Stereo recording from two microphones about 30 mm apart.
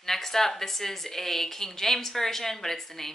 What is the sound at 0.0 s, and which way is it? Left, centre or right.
A woman's voice, centre.